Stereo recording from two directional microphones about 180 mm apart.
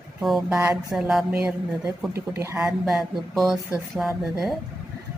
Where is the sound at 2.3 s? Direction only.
15° right (ahead or behind).